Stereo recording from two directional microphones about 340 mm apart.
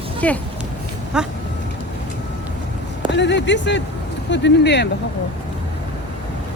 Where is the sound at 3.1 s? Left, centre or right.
Left.